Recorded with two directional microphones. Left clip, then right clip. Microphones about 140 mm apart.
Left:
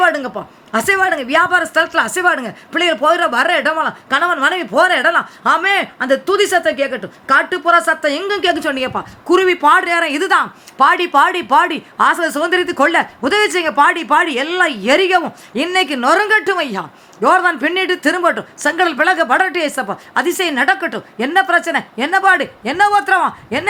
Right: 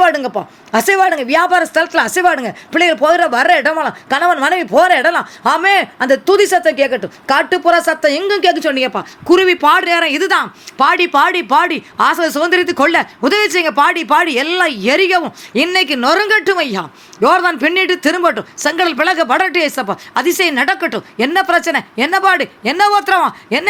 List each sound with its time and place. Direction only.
0.0 s a woman's voice: 20° right (ahead or behind)